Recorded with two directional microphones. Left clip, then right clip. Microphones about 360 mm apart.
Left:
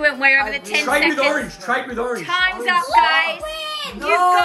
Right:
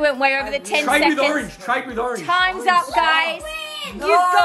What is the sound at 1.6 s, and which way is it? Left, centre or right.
Speech, right.